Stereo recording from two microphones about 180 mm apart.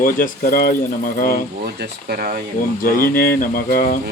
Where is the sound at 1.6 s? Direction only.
60° right (ahead or behind).